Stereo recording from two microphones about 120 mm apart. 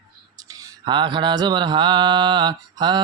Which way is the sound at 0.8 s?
40° right (ahead or behind).